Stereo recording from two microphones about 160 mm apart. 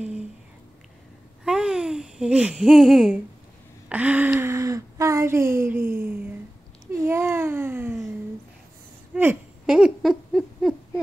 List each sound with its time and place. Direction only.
1.4 s babbling: 5° right (ahead or behind)
3.9 s speech: 10° right (ahead or behind)
7.0 s babbling: 15° right (ahead or behind)
9.1 s a sound: 10° right (ahead or behind)